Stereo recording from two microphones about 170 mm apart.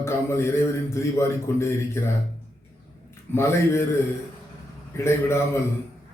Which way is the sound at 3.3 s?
15° left (ahead or behind).